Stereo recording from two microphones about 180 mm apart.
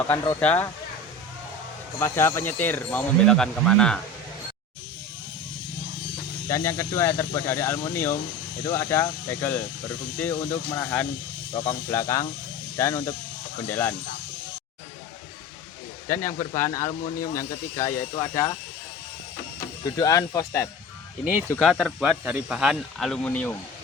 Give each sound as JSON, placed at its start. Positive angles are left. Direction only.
{"t": 0.3, "sound": "speech", "side_deg": 10}
{"t": 2.0, "sound": "speech", "side_deg": 15}
{"t": 6.5, "sound": "speech", "side_deg": 15}
{"t": 11.5, "sound": "speech", "side_deg": 25}
{"t": 16.2, "sound": "speech", "side_deg": 15}
{"t": 19.5, "sound": "speech", "side_deg": 20}
{"t": 21.6, "sound": "speech", "side_deg": 0}